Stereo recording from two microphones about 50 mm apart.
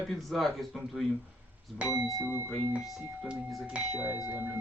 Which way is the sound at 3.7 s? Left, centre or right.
Right.